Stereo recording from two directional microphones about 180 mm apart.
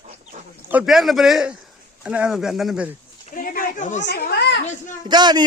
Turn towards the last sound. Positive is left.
turn(degrees=-25)  # may be behind; listen again after turning